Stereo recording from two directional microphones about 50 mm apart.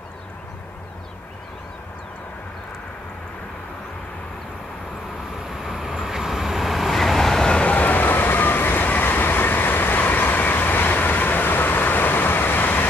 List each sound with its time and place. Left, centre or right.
5.5 s vehicle: centre
7.4 s train: left